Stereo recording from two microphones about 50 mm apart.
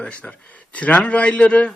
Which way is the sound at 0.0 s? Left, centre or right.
Left.